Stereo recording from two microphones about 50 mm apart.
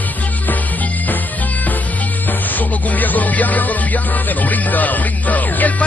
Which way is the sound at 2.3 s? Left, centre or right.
Left.